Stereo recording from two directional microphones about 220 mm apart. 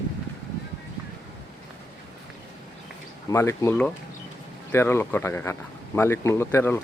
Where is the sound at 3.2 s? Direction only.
15° left (ahead or behind).